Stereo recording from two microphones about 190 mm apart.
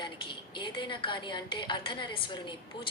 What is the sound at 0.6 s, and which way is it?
A woman's voice, 25° left (ahead or behind).